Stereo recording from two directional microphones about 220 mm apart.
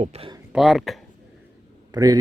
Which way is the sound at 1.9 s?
15° right (ahead or behind).